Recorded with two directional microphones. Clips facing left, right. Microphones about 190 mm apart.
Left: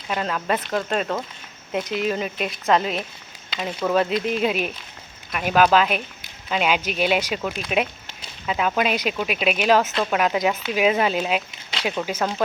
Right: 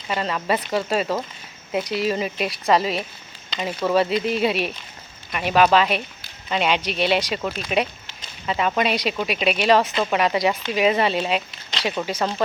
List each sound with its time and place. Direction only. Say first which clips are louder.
0.1 s speech: right 1 dB; centre (ahead or behind)